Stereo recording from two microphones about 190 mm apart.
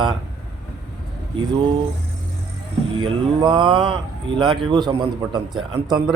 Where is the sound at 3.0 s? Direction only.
25° right (ahead or behind).